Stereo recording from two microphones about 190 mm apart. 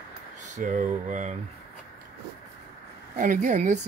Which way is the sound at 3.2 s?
40° right (ahead or behind).